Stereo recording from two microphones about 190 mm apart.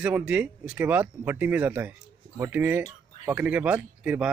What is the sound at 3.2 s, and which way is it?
Speech, 10° right (ahead or behind).